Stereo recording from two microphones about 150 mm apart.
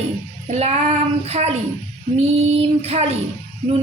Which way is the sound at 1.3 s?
45° right (ahead or behind).